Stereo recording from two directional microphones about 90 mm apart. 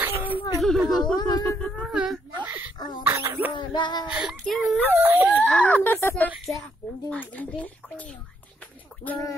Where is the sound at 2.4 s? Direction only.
20° right (ahead or behind).